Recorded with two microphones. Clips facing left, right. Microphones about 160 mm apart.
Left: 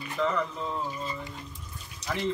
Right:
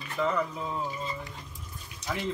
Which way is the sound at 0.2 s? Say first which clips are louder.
Even; 5° right (ahead or behind).